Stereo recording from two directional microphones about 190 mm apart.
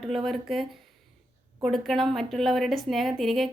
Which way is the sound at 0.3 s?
Centre (ahead or behind).